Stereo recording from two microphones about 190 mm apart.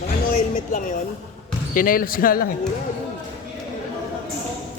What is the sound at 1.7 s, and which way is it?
Speech, 45° left (ahead or behind).